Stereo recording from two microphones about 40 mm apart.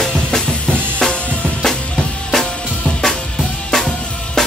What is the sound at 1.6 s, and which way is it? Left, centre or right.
Drum kit, centre.